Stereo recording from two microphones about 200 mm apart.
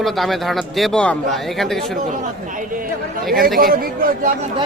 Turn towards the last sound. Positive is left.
turn(degrees=-45)  # may be behind; listen again after turning